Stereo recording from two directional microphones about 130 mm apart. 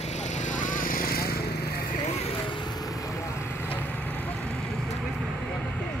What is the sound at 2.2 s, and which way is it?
Vehicle, 40° left (ahead or behind).